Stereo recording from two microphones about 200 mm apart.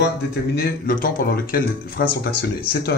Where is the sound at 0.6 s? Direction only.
45° left (ahead or behind).